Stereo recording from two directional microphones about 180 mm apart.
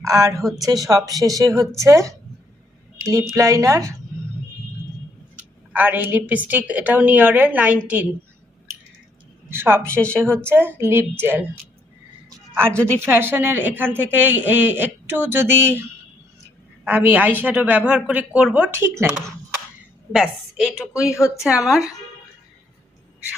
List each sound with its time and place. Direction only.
0.0 s a woman's voice: 15° right (ahead or behind)
5.4 s a woman's voice: 10° right (ahead or behind)
9.5 s a woman's voice: 10° right (ahead or behind)
12.6 s speech: 5° left (ahead or behind)
13.0 s a woman's voice: 10° right (ahead or behind)
16.8 s a woman's voice: 10° right (ahead or behind)
20.1 s a woman's voice: 5° right (ahead or behind)
21.1 s speech: 15° left (ahead or behind)
21.4 s a woman's voice: 5° right (ahead or behind)